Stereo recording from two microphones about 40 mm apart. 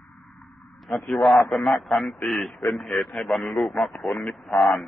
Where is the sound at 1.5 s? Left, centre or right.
Centre.